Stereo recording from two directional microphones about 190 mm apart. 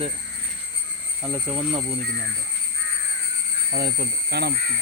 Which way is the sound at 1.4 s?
25° right (ahead or behind).